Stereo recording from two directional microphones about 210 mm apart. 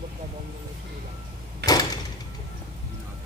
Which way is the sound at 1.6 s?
55° right (ahead or behind).